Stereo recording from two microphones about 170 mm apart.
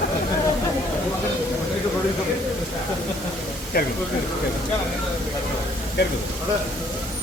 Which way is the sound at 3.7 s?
60° left (ahead or behind).